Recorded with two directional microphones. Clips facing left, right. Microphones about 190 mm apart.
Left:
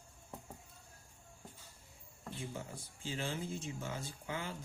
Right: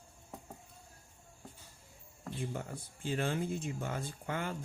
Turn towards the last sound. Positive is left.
turn(degrees=-55)  # may be behind; listen again after turning